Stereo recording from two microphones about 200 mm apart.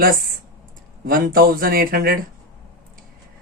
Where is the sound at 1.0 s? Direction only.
45° right (ahead or behind).